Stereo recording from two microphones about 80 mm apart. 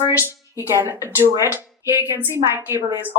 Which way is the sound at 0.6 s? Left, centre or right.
Right.